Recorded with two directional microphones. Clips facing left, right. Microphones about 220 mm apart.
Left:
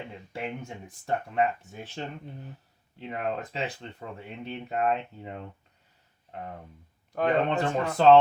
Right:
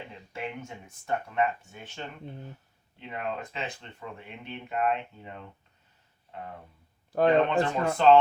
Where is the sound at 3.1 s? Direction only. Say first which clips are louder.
Left 3 dB; 40° left (ahead or behind).